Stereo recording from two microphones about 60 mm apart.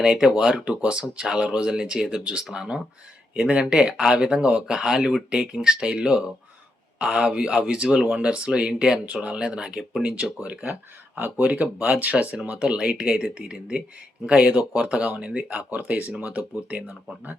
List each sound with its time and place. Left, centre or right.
0.0 s speech: centre
7.8 s speech: centre
8.2 s speech: centre